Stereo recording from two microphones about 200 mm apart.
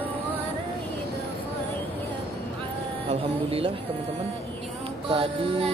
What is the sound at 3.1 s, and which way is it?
Music, 30° right (ahead or behind).